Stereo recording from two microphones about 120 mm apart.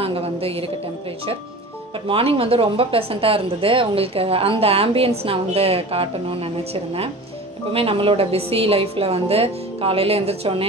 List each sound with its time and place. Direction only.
0.0 s a woman's voice: 55° right (ahead or behind)
2.0 s speech: 50° right (ahead or behind)